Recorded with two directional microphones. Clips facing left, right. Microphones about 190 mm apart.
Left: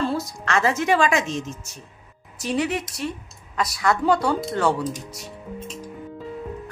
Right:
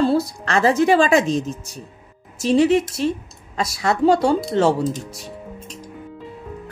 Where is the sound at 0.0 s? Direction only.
35° right (ahead or behind).